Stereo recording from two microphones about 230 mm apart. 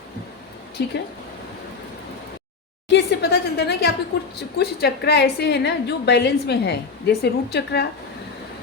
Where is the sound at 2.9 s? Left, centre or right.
Left.